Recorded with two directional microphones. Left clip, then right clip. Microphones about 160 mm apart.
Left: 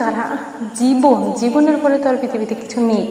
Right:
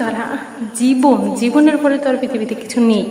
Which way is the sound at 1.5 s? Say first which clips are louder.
Right 1 dB; 45° right (ahead or behind).